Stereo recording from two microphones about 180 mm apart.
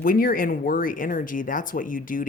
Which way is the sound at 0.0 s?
50° left (ahead or behind).